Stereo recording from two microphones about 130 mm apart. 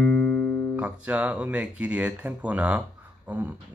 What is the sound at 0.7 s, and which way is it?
Speech, 10° right (ahead or behind).